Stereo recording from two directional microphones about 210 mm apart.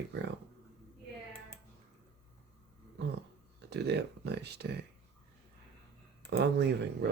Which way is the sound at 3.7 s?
50° right (ahead or behind).